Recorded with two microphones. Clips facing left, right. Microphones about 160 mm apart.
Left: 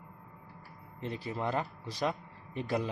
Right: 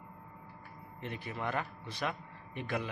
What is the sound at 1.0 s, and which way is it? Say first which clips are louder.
A man's voice: left 4 dB; 35° left (ahead or behind).